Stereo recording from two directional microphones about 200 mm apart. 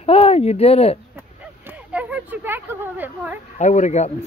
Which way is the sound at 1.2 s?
10° right (ahead or behind).